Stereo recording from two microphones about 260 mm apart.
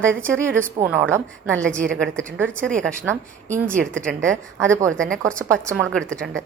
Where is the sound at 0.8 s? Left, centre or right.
Centre.